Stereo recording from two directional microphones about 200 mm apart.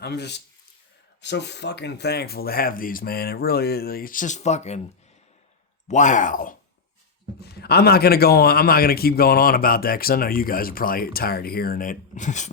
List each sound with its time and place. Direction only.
0.0 s a man's voice: 55° left (ahead or behind); by 4.8 s 35° left (ahead or behind)
5.9 s speech: 40° left (ahead or behind)
7.5 s a man's voice: 55° left (ahead or behind); by 12.5 s 35° left (ahead or behind)